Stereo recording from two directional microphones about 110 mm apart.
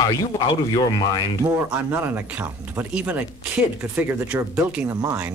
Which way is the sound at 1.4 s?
20° right (ahead or behind).